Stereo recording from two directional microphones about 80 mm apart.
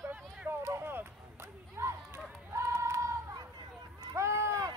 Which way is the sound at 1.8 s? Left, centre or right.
Right.